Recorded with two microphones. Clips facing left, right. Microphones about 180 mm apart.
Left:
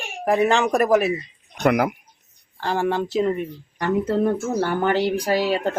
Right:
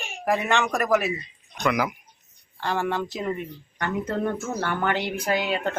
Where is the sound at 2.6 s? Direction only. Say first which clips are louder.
Left 4 dB; 30° left (ahead or behind).